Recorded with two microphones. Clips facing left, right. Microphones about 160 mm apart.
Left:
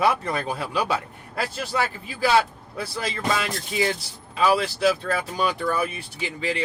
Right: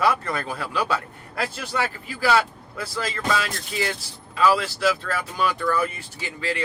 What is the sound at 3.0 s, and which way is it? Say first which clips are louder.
Speech: even; 20° left (ahead or behind).